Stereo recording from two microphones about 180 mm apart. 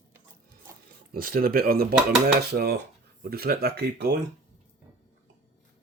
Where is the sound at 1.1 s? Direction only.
55° right (ahead or behind).